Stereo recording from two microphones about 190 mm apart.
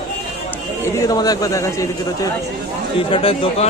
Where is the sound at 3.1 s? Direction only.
30° left (ahead or behind).